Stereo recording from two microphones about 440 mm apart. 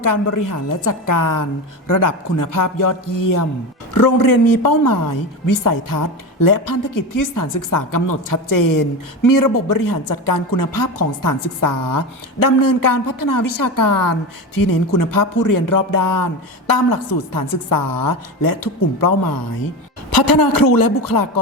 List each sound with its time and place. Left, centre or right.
0.0 s a woman's voice: left